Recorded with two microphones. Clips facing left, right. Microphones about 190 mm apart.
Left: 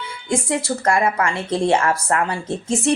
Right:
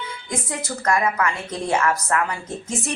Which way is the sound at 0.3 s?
30° left (ahead or behind).